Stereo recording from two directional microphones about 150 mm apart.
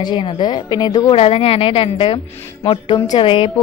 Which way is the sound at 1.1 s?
40° left (ahead or behind).